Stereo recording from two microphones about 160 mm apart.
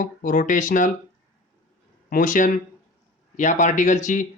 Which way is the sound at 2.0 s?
60° left (ahead or behind).